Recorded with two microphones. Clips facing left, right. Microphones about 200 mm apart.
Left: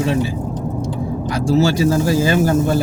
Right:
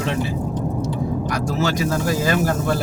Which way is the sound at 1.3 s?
30° left (ahead or behind).